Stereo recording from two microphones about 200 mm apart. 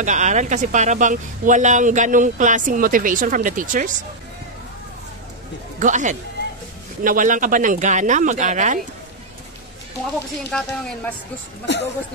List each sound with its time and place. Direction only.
0.0 s speech: 35° right (ahead or behind)
5.8 s speech: 40° right (ahead or behind)
10.5 s speech: 5° left (ahead or behind)
11.6 s speech: 60° left (ahead or behind)